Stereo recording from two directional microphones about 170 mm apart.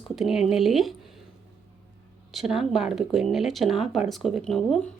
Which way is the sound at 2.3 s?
Centre (ahead or behind).